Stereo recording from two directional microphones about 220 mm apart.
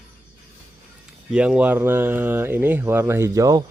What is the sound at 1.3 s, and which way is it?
Speech, 5° right (ahead or behind).